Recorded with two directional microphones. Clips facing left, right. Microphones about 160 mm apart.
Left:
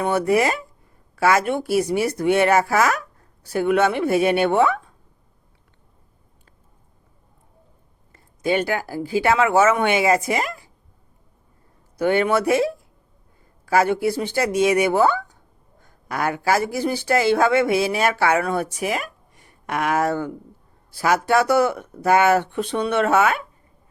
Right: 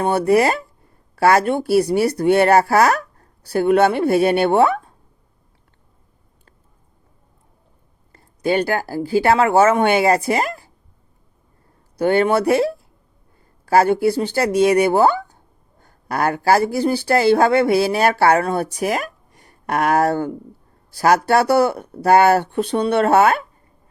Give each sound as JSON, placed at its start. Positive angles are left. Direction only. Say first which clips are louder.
{"t": 0.0, "sound": "speech", "louder": "right 3 dB", "side_deg": -30}
{"t": 8.1, "sound": "speech", "louder": "right 2 dB", "side_deg": -35}
{"t": 11.9, "sound": "speech", "louder": "right 3 dB", "side_deg": -30}